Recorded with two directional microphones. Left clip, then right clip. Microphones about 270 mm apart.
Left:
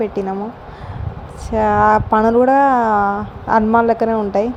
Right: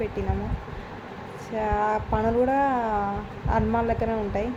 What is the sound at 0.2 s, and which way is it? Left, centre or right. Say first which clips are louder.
Speech: left 10 dB; left.